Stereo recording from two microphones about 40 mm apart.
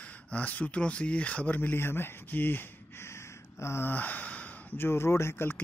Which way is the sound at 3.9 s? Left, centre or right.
Left.